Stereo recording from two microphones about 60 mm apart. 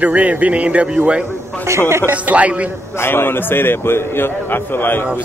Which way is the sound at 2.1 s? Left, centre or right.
Right.